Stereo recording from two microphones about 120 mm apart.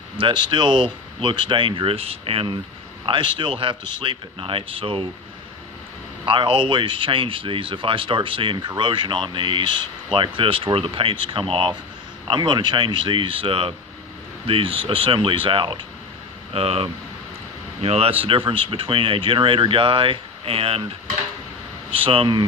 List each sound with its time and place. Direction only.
0.2 s speech: 40° right (ahead or behind)
3.1 s speech: 45° right (ahead or behind)
6.2 s speech: 45° right (ahead or behind)
18.2 s speech: 45° right (ahead or behind)
21.9 s speech: 50° right (ahead or behind)